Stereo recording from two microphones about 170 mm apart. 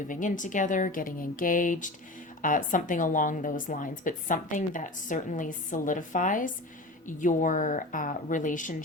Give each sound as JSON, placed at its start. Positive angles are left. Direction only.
{"t": 0.1, "sound": "a woman's voice", "side_deg": 50}